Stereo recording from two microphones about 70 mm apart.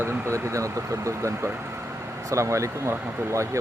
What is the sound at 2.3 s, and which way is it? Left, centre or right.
Speech, right.